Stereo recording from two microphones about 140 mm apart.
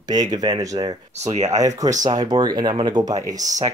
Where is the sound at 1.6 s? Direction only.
25° right (ahead or behind).